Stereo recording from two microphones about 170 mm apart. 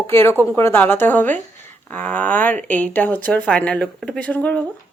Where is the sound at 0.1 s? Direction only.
15° left (ahead or behind).